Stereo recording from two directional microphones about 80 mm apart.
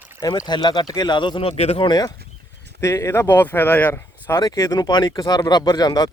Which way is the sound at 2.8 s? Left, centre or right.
Left.